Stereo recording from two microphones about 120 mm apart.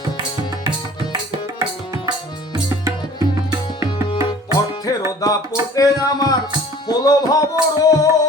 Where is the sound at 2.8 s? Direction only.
25° right (ahead or behind).